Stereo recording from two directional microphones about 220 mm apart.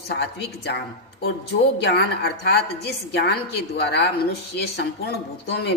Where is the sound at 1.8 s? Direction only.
50° left (ahead or behind).